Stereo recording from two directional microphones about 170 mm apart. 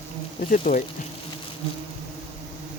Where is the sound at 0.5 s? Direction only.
50° left (ahead or behind).